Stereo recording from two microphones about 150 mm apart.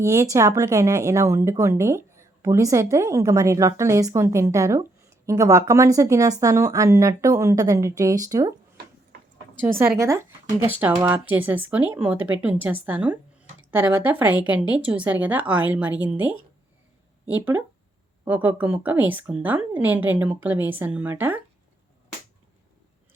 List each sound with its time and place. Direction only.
0.0 s speech: 20° right (ahead or behind)
9.6 s speech: 15° right (ahead or behind)